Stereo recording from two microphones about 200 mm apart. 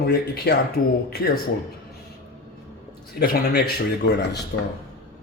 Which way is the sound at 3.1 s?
50° left (ahead or behind).